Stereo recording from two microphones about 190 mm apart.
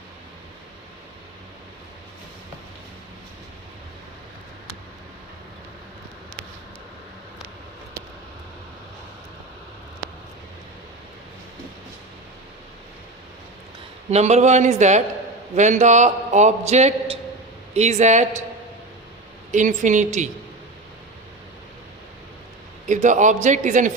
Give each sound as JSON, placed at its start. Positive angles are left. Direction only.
{"t": 14.1, "sound": "a man's voice", "side_deg": -35}
{"t": 19.5, "sound": "a man's voice", "side_deg": -40}
{"t": 22.9, "sound": "a man's voice", "side_deg": -40}